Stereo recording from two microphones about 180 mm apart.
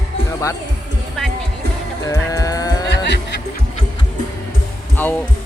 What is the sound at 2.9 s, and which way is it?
Music, 75° left (ahead or behind).